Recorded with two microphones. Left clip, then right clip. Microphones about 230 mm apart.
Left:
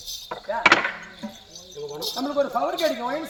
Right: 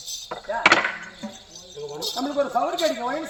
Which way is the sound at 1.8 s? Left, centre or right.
Centre.